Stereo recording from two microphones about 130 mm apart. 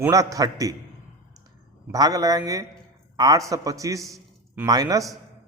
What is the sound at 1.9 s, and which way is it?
A man's voice, 30° right (ahead or behind).